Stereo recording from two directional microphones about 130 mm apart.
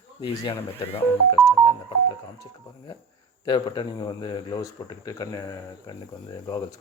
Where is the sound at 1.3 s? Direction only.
30° left (ahead or behind).